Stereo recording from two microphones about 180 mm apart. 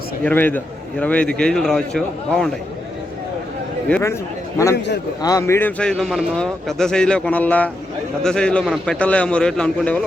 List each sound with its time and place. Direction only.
0.3 s a man's voice: 10° left (ahead or behind)
3.8 s a man's voice: 10° left (ahead or behind)